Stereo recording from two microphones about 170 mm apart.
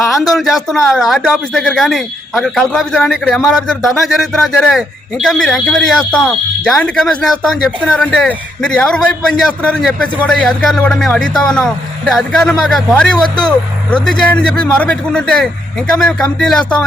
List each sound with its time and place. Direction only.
0.1 s speech: centre (ahead or behind)
13.2 s speech: 25° left (ahead or behind)
13.9 s speech: 5° left (ahead or behind)